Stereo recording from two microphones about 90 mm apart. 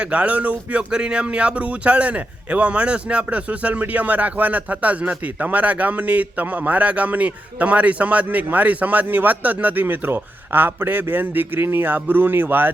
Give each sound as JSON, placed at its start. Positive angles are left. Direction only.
{"t": 0.0, "sound": "speech", "side_deg": -15}